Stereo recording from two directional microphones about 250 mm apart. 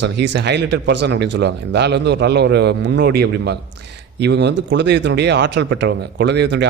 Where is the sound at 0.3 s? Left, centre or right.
Right.